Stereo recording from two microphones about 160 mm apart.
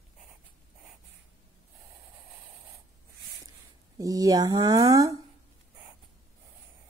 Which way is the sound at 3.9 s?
20° right (ahead or behind).